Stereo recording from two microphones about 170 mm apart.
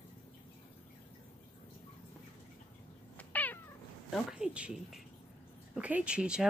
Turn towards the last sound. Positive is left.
turn(degrees=-5)  # may be behind; listen again after turning